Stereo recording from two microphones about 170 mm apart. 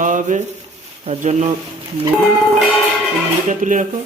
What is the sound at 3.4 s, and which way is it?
Speech, 50° right (ahead or behind).